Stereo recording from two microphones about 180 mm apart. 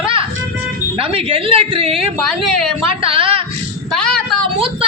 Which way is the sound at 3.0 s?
30° right (ahead or behind).